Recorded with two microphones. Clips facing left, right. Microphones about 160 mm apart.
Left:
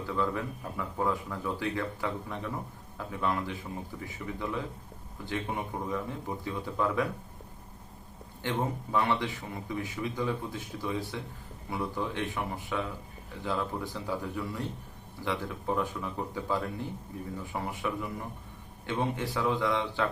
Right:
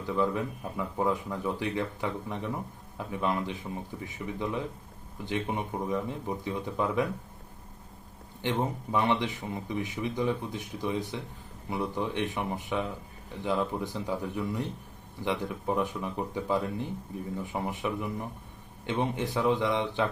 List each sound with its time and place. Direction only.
0.0 s speech: 20° right (ahead or behind)
8.4 s speech: 20° right (ahead or behind)